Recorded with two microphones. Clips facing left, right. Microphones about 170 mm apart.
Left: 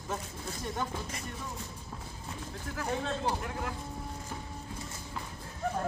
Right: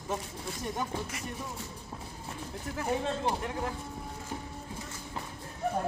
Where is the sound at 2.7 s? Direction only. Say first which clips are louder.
Right 2 dB; 20° right (ahead or behind).